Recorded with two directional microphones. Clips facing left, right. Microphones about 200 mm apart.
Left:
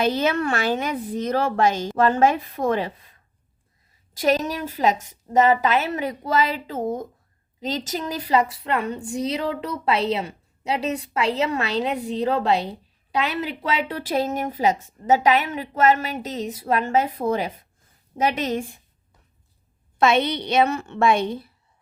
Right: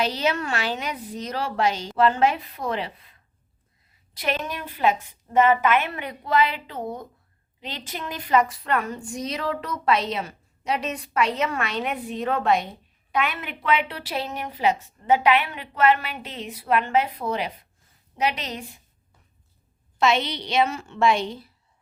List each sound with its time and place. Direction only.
0.0 s a woman's voice: 50° left (ahead or behind)
4.2 s a woman's voice: 40° left (ahead or behind)
20.0 s a woman's voice: 55° left (ahead or behind)